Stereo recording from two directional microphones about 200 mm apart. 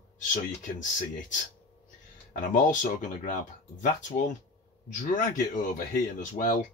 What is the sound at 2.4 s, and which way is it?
Speech, 40° left (ahead or behind).